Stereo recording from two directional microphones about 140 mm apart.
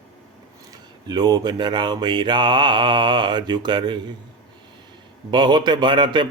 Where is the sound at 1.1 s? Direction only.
30° right (ahead or behind).